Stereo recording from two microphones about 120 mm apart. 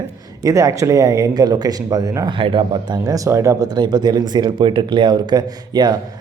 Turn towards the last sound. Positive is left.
turn(degrees=-35)  # may be behind; listen again after turning